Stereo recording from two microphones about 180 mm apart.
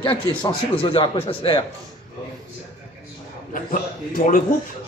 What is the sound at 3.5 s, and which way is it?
Speech, 50° left (ahead or behind).